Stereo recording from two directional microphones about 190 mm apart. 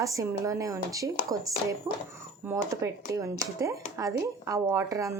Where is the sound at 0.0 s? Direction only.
15° right (ahead or behind).